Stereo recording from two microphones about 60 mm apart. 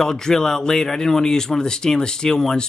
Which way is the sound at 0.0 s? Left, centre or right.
Centre.